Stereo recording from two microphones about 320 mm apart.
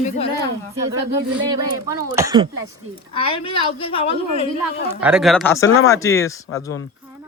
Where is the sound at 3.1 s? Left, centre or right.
Centre.